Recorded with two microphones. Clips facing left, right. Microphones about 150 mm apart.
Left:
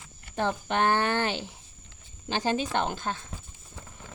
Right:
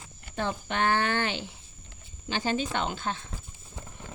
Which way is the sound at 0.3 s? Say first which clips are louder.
Left 3 dB; 45° left (ahead or behind).